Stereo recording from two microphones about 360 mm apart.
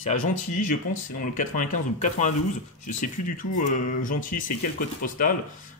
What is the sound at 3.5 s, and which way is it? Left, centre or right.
Speech, left.